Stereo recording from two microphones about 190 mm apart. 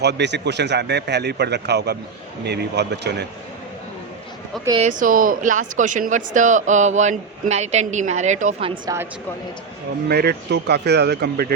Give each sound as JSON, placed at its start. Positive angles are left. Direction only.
{"t": 0.0, "sound": "a man's voice", "side_deg": -65}
{"t": 4.8, "sound": "speech", "side_deg": -40}
{"t": 8.7, "sound": "speech", "side_deg": -15}
{"t": 10.1, "sound": "a man's voice", "side_deg": -55}